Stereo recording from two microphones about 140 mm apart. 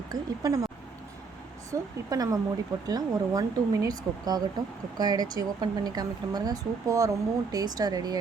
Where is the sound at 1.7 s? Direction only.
25° right (ahead or behind).